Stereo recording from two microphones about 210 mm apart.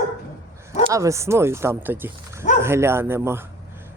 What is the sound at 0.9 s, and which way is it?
Speech, 15° right (ahead or behind).